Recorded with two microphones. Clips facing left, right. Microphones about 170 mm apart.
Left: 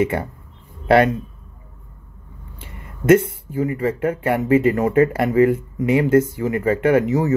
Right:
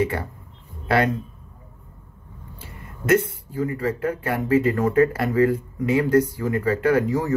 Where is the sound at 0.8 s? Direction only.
25° left (ahead or behind).